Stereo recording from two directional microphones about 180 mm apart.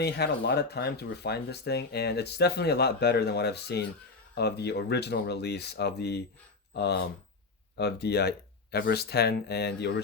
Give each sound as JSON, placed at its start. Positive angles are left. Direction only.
{"t": 0.0, "sound": "speech", "side_deg": 65}